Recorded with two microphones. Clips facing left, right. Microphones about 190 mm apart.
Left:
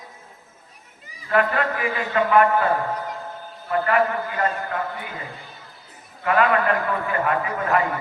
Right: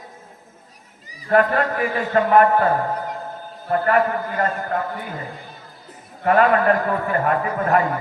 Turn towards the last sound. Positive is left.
turn(degrees=-45)  # may be behind; listen again after turning